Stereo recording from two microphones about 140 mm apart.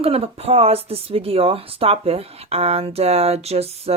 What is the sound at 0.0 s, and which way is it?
Speech, 45° right (ahead or behind).